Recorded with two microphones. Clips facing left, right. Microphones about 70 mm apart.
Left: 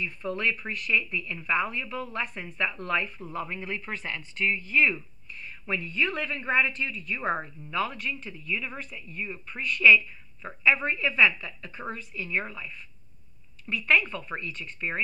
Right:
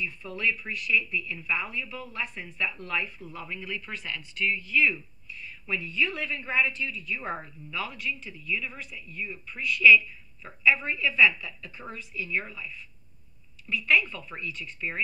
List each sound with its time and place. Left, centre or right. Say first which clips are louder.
0.0 s speech: left 1 dB; left